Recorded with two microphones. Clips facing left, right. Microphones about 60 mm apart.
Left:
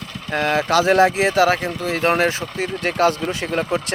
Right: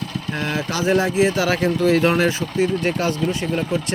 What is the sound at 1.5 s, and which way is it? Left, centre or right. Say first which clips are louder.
Speech: even; left.